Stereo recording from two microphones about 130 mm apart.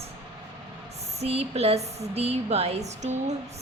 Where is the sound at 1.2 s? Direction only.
55° right (ahead or behind).